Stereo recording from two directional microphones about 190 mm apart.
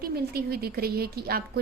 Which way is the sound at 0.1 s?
55° right (ahead or behind).